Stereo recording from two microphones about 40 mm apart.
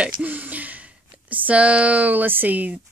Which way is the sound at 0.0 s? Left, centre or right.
Right.